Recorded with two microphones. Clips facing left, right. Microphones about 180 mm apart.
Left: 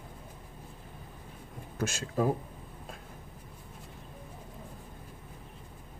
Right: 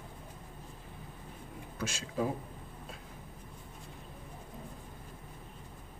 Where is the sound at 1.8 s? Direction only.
45° left (ahead or behind).